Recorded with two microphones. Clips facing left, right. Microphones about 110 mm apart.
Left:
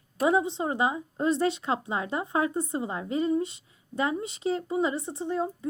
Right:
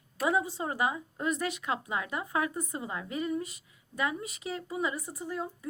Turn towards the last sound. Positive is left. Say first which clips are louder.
# left 7 dB
turn(degrees=25)  # may be behind; listen again after turning